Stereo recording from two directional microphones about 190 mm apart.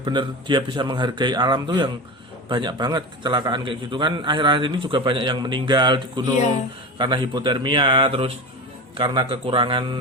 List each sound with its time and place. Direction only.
0.0 s a man's voice: 25° right (ahead or behind)